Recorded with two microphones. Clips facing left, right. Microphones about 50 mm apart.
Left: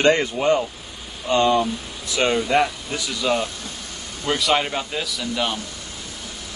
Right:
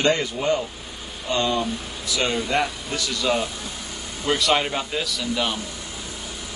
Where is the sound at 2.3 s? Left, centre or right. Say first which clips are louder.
Left 5 dB; centre.